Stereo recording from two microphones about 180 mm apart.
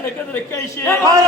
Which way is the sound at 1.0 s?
20° right (ahead or behind).